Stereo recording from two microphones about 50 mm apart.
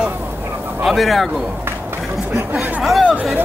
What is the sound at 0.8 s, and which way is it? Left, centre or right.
Speech, centre.